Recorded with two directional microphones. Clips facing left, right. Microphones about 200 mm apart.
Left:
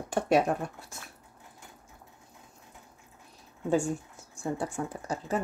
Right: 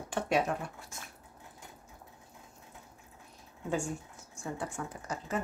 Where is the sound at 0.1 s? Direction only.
40° left (ahead or behind).